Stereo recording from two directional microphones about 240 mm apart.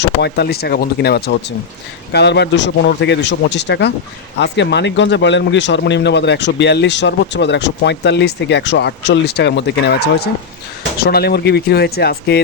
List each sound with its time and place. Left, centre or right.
0.0 s speech: left